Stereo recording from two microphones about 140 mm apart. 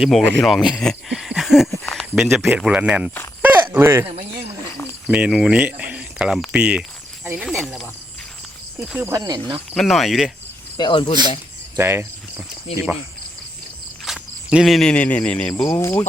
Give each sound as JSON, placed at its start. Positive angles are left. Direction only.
{"t": 0.0, "sound": "speech", "side_deg": 0}
{"t": 3.4, "sound": "a sound", "side_deg": -15}
{"t": 5.0, "sound": "speech", "side_deg": -10}
{"t": 7.3, "sound": "cricket", "side_deg": -5}
{"t": 8.9, "sound": "speech", "side_deg": -10}
{"t": 9.1, "sound": "speech", "side_deg": -25}
{"t": 9.7, "sound": "speech", "side_deg": 0}
{"t": 10.8, "sound": "speech", "side_deg": 35}
{"t": 11.8, "sound": "speech", "side_deg": -15}
{"t": 14.0, "sound": "speech", "side_deg": -5}